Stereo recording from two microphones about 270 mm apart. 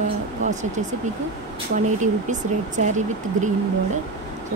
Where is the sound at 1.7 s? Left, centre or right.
Right.